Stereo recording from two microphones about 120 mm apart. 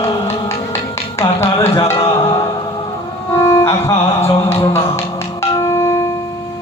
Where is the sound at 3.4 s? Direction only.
25° left (ahead or behind).